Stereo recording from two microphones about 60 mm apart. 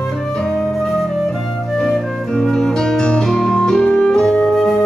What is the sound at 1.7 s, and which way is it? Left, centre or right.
Music, centre.